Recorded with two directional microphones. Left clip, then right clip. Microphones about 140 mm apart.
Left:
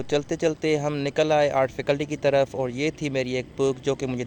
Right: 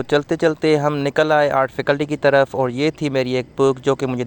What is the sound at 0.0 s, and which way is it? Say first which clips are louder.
Speech: right 7 dB; 40° right (ahead or behind).